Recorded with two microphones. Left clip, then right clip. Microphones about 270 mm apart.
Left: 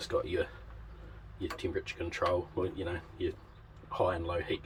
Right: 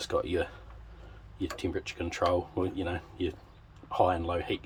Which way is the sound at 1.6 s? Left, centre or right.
Right.